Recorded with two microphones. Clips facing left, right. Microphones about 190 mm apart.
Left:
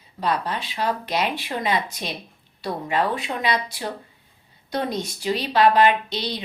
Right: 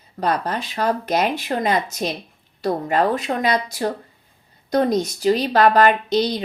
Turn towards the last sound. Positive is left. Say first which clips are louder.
# right 6 dB
turn(degrees=-45)  # may be behind; listen again after turning